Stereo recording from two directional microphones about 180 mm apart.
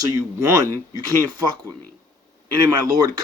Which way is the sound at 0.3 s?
15° right (ahead or behind).